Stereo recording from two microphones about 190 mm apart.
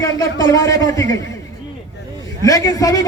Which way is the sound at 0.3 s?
20° left (ahead or behind).